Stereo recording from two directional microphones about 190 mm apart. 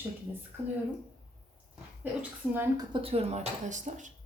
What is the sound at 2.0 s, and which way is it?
Speech, 10° right (ahead or behind).